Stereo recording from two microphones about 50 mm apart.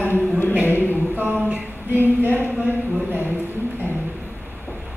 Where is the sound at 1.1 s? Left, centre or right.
Right.